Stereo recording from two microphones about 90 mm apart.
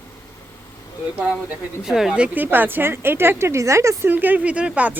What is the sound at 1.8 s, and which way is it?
Speech, 5° right (ahead or behind).